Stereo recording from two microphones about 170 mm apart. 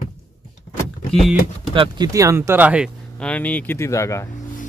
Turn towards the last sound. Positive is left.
turn(degrees=15)  # may be behind; listen again after turning